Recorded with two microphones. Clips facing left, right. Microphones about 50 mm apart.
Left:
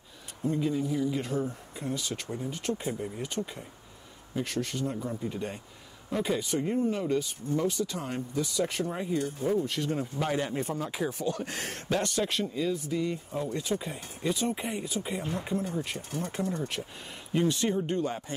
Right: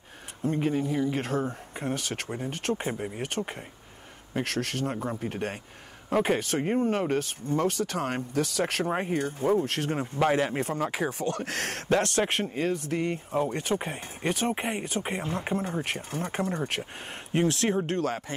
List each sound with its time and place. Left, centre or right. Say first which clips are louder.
0.4 s speech: right 2 dB; right
2.7 s speech: right 3 dB; right
17.8 s speech: right 2 dB; right